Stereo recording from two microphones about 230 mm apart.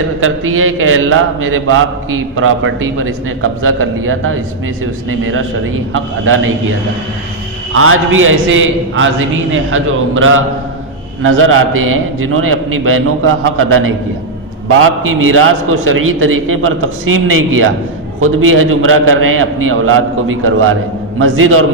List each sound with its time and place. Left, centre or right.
0.2 s a man's voice: right
7.7 s a man's voice: right